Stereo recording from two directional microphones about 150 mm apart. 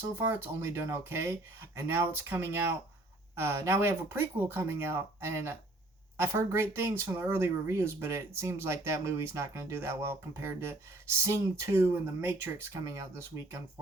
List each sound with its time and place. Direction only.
0.2 s speech: 15° right (ahead or behind)